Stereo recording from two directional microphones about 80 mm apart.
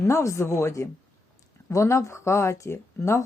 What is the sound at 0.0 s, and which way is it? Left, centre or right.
Speech, left.